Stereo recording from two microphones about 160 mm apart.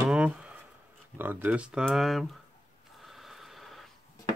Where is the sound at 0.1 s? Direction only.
5° right (ahead or behind).